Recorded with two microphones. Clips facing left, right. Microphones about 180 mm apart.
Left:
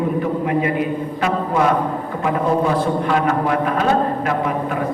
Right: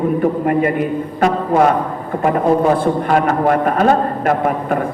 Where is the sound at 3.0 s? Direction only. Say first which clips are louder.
Right 6 dB; 50° right (ahead or behind).